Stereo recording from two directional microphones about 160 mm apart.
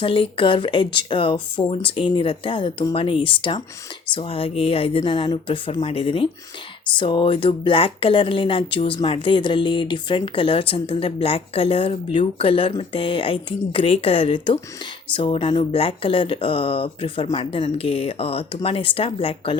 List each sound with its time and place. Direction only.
0.0 s speech: 30° left (ahead or behind)